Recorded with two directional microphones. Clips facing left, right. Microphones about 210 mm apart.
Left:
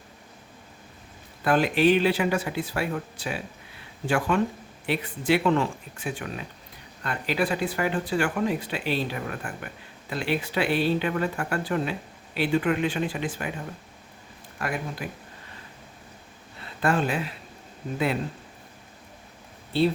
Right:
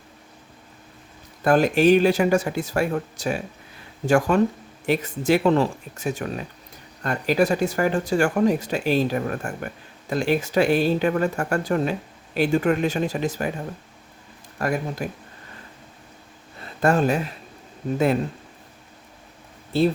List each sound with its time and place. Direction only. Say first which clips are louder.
1.5 s speech: right 4 dB; 45° right (ahead or behind)
14.6 s speech: right 6 dB; 40° right (ahead or behind)
16.8 s speech: right 5 dB; 45° right (ahead or behind)